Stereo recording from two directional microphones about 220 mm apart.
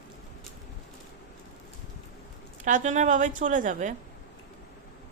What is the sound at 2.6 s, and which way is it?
A woman's voice, 35° right (ahead or behind).